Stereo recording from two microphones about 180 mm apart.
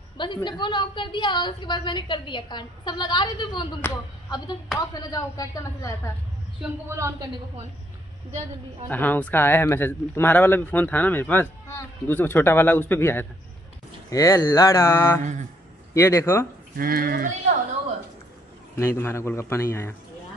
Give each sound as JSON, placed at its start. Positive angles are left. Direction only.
{"t": 0.2, "sound": "a woman's voice", "side_deg": 25}
{"t": 6.9, "sound": "speech", "side_deg": -15}
{"t": 8.8, "sound": "speech", "side_deg": 10}
{"t": 16.7, "sound": "speech", "side_deg": -55}
{"t": 18.8, "sound": "speech", "side_deg": 15}